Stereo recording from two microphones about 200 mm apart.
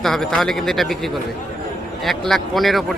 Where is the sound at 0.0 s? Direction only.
Centre (ahead or behind).